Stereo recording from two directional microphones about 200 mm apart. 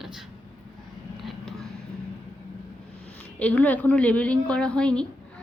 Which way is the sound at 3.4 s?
5° left (ahead or behind).